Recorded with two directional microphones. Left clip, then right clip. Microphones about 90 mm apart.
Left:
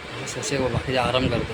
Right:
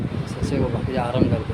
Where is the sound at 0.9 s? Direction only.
15° right (ahead or behind).